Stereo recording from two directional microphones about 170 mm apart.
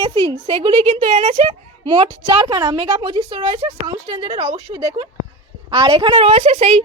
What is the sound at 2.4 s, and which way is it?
A woman's voice, 25° right (ahead or behind).